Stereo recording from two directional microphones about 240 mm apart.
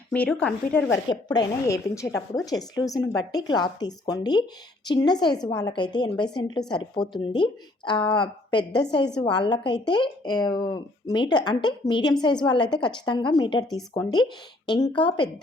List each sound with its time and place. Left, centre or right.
0.1 s speech: centre
1.0 s a woman's voice: centre